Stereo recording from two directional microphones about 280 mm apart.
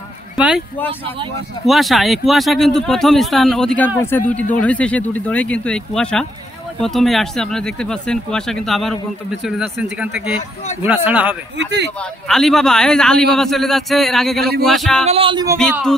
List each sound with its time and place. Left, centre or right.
0.4 s speech: centre
11.5 s speech: right
12.0 s speech: centre
15.0 s speech: centre